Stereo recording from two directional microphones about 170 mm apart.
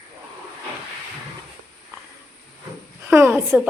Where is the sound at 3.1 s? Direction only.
10° right (ahead or behind).